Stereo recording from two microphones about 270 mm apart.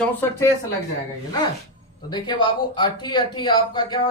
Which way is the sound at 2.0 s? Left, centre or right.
Centre.